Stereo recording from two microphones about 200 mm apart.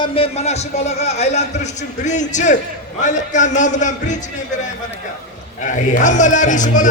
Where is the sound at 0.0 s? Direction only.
30° left (ahead or behind).